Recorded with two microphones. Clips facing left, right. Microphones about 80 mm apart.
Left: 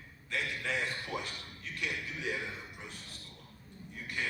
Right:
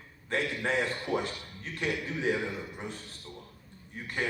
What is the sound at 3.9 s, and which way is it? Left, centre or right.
Speech, right.